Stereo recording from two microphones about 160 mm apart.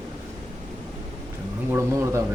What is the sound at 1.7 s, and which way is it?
Speech, 15° right (ahead or behind).